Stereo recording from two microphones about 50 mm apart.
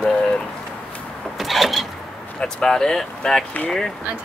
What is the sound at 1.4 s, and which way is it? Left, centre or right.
Vehicle, centre.